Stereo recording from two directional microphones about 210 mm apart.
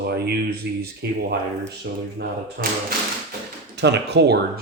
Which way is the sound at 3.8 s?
55° right (ahead or behind).